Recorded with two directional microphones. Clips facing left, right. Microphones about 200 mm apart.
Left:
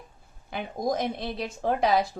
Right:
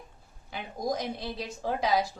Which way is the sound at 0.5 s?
55° left (ahead or behind).